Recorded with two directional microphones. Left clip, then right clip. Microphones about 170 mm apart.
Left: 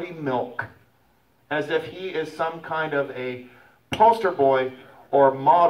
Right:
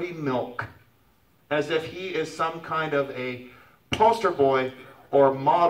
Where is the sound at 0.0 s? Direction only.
30° left (ahead or behind).